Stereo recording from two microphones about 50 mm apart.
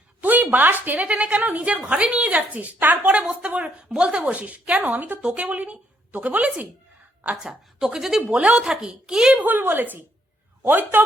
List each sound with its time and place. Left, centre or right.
0.2 s a woman's voice: right
3.2 s a woman's voice: right
4.8 s a woman's voice: right
7.3 s speech: centre
8.3 s a woman's voice: right
9.3 s a woman's voice: right